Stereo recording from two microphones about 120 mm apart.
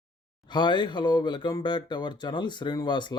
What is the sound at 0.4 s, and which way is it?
Speech, 40° left (ahead or behind).